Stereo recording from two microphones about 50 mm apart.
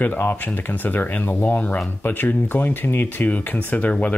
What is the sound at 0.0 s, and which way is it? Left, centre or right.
Speech, left.